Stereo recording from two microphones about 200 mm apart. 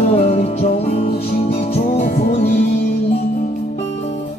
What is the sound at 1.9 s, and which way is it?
Music, 40° left (ahead or behind).